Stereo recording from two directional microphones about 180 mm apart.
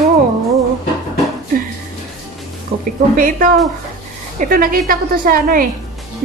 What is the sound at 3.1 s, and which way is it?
Speech, 50° right (ahead or behind).